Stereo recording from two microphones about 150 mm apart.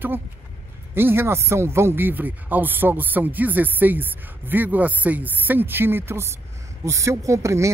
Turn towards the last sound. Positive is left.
turn(degrees=-20)  # may be behind; listen again after turning